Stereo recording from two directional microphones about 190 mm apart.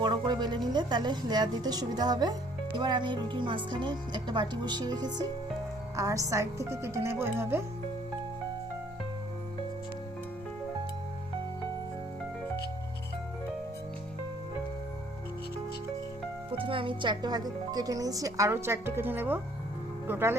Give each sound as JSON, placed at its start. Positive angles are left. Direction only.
{"t": 0.0, "sound": "a woman's voice", "side_deg": -25}
{"t": 16.5, "sound": "speech", "side_deg": -30}